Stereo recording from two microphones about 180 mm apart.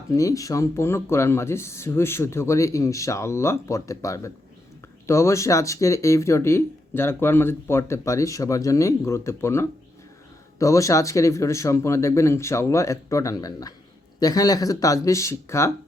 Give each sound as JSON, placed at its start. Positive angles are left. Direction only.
{"t": 0.1, "sound": "speech", "side_deg": 20}